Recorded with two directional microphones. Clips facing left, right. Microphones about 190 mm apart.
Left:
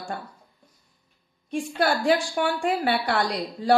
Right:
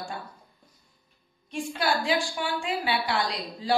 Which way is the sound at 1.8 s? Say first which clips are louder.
Left 5 dB; 50° left (ahead or behind).